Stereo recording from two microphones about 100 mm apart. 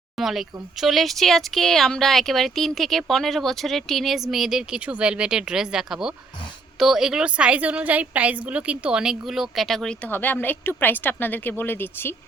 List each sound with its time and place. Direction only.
0.2 s a woman's voice: centre (ahead or behind)
10.1 s a woman's voice: 20° left (ahead or behind)